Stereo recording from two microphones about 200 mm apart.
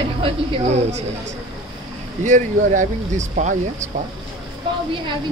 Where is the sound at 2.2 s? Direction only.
40° right (ahead or behind).